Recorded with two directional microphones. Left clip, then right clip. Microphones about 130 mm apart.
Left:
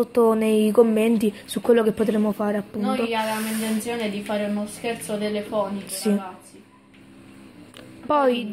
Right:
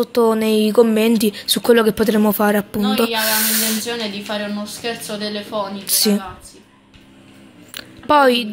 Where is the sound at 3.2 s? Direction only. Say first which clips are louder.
Right 7 dB; 5° right (ahead or behind).